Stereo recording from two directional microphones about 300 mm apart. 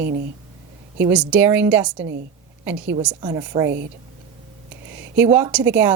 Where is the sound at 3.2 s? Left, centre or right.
Centre.